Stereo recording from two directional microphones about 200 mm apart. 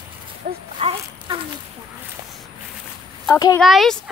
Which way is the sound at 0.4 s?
40° right (ahead or behind).